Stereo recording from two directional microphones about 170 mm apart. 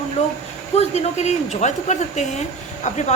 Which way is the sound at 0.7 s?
40° left (ahead or behind).